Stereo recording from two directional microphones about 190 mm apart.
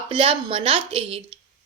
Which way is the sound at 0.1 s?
25° right (ahead or behind).